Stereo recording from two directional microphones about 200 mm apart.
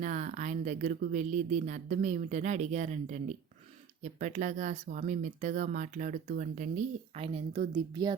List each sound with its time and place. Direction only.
0.0 s speech: 35° right (ahead or behind)